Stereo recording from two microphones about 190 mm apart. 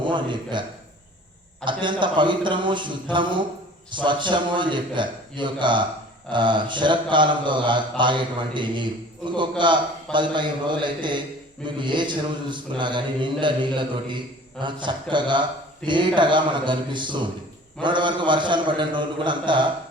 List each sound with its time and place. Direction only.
0.0 s mantra: 25° right (ahead or behind)
1.6 s mantra: 25° right (ahead or behind)